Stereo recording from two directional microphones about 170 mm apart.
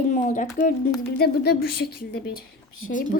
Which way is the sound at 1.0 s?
70° left (ahead or behind).